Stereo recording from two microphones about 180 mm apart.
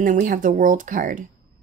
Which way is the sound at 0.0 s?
45° right (ahead or behind).